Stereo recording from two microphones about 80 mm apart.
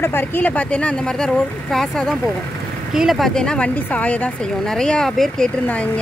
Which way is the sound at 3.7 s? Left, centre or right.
Centre.